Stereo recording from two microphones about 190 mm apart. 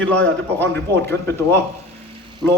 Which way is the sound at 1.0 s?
15° left (ahead or behind).